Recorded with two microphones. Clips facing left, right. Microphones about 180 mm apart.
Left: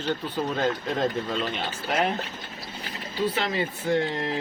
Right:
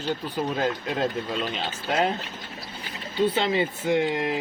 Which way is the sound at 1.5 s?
20° right (ahead or behind).